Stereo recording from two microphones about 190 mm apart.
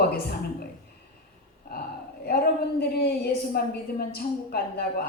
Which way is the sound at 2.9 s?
55° left (ahead or behind).